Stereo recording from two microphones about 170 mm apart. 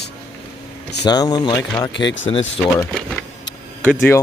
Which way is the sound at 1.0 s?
25° left (ahead or behind).